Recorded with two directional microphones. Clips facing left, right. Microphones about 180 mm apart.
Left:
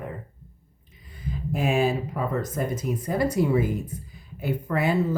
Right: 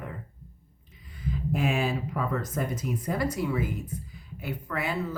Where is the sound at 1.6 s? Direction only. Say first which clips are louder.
Left 6 dB; 40° left (ahead or behind).